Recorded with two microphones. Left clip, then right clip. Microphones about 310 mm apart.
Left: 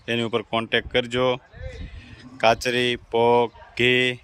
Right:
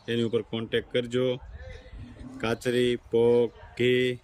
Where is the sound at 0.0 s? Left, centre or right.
Centre.